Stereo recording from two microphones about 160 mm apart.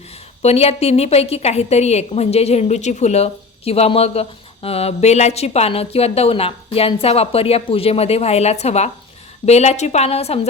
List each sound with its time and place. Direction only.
0.4 s a woman's voice: 40° left (ahead or behind)